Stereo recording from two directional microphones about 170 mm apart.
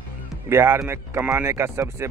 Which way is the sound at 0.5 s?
15° right (ahead or behind).